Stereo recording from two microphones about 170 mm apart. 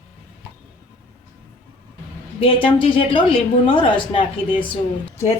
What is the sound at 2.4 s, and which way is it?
Speech, 30° left (ahead or behind).